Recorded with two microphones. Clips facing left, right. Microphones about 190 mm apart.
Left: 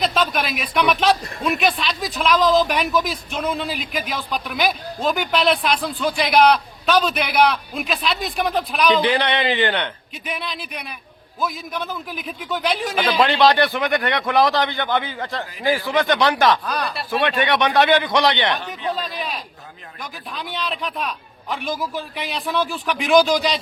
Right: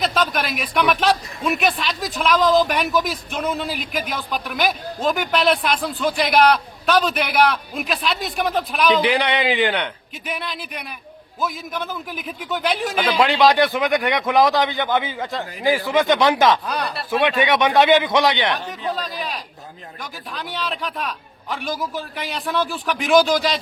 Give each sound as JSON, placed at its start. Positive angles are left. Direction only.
{"t": 0.0, "sound": "a man's voice", "side_deg": 0}
{"t": 20.3, "sound": "speech", "side_deg": 0}